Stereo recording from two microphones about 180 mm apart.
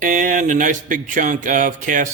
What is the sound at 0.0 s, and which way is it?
Speech, 50° right (ahead or behind).